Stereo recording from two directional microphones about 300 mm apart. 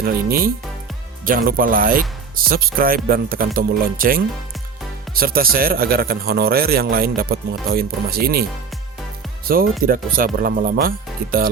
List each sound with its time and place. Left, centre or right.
0.0 s a man's voice: right
9.8 s speech: right